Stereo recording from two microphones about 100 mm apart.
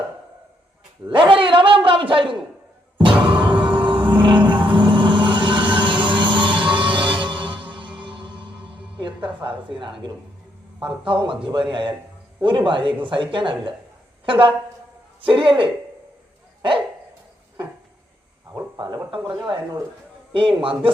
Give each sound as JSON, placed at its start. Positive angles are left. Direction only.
{"t": 1.0, "sound": "a sound", "side_deg": -55}
{"t": 3.2, "sound": "music", "side_deg": -55}
{"t": 9.0, "sound": "a sound", "side_deg": -55}
{"t": 11.0, "sound": "a man's voice", "side_deg": -55}
{"t": 19.1, "sound": "speech", "side_deg": -50}
{"t": 20.3, "sound": "a man's voice", "side_deg": -60}